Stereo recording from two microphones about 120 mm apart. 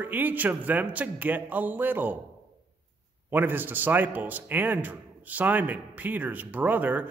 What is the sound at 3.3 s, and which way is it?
A man's voice, 15° right (ahead or behind).